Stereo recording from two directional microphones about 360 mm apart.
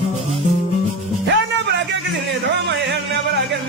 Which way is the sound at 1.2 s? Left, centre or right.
Right.